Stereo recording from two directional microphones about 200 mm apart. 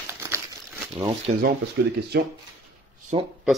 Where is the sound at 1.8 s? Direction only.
60° right (ahead or behind).